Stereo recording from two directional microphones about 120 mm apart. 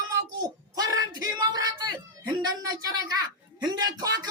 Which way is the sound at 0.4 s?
30° right (ahead or behind).